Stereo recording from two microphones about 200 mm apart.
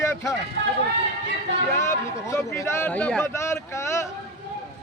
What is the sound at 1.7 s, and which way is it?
A man's voice, 15° left (ahead or behind).